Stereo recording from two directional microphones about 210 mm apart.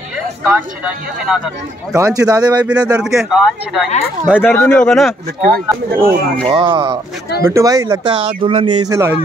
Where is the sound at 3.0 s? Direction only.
Centre (ahead or behind).